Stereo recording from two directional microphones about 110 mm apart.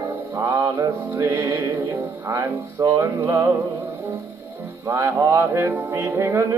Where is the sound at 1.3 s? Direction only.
30° right (ahead or behind).